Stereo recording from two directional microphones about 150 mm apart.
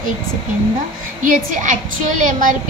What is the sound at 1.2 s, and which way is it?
A woman's voice, 60° right (ahead or behind).